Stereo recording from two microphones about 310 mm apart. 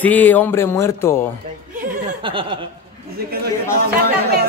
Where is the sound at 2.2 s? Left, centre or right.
Centre.